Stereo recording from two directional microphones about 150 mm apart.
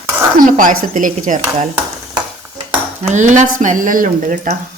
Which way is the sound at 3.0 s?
55° right (ahead or behind).